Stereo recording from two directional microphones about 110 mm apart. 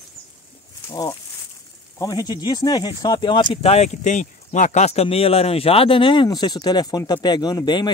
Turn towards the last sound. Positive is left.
turn(degrees=40)  # may be behind; listen again after turning